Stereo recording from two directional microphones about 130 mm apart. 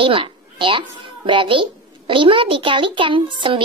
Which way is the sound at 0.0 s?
40° right (ahead or behind).